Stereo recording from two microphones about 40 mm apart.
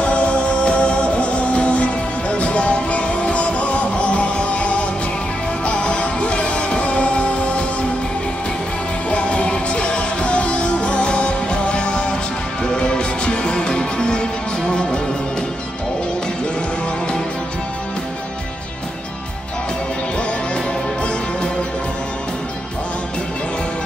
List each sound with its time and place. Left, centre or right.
0.0 s music: left
9.1 s music: left